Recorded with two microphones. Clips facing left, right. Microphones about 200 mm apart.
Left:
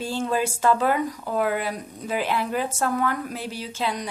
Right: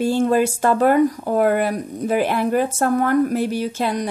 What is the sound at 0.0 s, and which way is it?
Speech, 55° right (ahead or behind).